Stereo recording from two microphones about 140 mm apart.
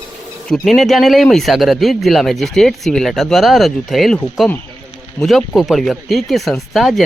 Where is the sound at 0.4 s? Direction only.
Centre (ahead or behind).